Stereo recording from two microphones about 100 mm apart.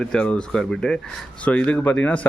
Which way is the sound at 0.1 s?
10° left (ahead or behind).